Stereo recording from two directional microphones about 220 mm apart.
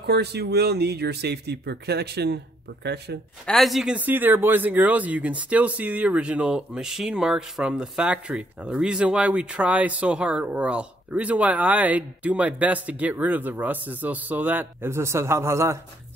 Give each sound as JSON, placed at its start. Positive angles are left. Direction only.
{"t": 0.0, "sound": "speech", "side_deg": -50}
{"t": 3.4, "sound": "speech", "side_deg": 0}